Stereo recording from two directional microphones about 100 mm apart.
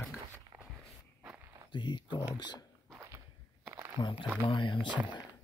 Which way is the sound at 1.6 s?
50° left (ahead or behind).